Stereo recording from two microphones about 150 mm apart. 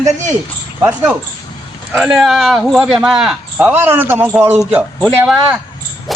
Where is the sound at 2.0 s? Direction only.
Centre (ahead or behind).